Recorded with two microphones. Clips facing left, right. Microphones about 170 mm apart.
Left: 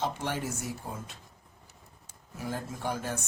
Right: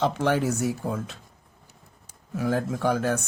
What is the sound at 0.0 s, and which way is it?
Speech, 90° right.